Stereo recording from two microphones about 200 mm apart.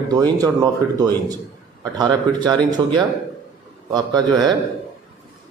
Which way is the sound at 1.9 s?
20° right (ahead or behind).